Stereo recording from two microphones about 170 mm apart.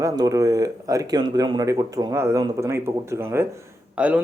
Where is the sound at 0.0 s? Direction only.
20° right (ahead or behind).